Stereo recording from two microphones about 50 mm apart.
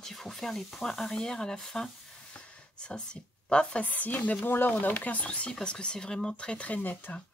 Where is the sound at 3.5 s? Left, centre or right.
Centre.